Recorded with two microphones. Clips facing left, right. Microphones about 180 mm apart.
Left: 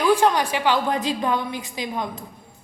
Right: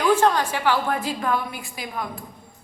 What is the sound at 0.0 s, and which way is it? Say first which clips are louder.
A woman's voice: left 1 dB; 15° left (ahead or behind).